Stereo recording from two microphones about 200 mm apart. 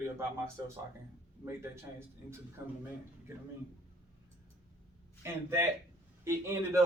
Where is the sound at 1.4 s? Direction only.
10° right (ahead or behind).